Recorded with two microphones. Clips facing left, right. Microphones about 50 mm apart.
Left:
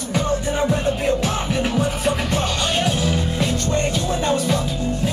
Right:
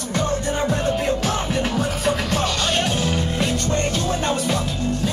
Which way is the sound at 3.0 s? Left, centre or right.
Centre.